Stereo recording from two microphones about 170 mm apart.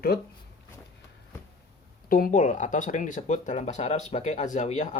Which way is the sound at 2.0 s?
55° left (ahead or behind).